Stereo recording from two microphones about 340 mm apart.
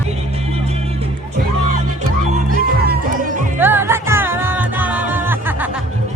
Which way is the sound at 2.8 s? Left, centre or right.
Right.